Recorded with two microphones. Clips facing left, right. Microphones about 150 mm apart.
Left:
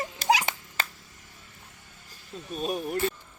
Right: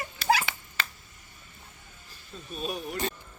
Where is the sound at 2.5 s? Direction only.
45° left (ahead or behind).